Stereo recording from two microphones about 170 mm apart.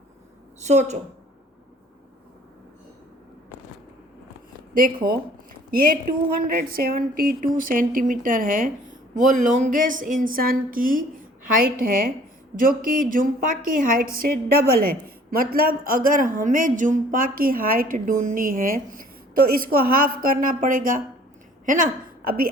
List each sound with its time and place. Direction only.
0.6 s a woman's voice: 40° right (ahead or behind)
4.7 s a woman's voice: 55° right (ahead or behind)